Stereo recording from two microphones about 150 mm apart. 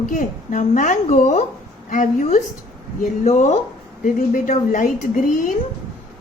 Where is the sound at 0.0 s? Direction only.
60° left (ahead or behind).